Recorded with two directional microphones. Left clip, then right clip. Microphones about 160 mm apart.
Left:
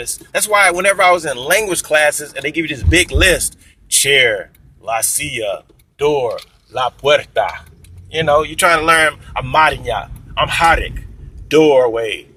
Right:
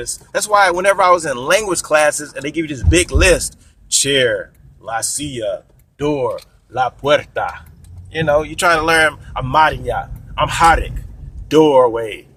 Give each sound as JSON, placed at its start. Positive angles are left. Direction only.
{"t": 0.0, "sound": "speech", "side_deg": -25}